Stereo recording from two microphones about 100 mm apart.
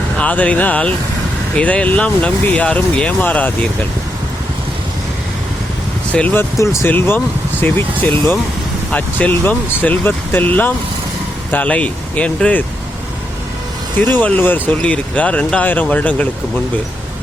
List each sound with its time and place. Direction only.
0.2 s speech: 15° left (ahead or behind)
6.1 s speech: 15° left (ahead or behind)
14.2 s speech: 15° left (ahead or behind)